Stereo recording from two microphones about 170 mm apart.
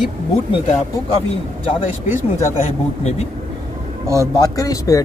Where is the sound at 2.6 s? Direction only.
40° left (ahead or behind).